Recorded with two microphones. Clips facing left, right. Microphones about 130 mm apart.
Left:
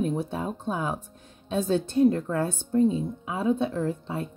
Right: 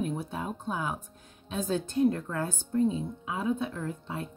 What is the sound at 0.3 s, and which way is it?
Speech, 25° left (ahead or behind).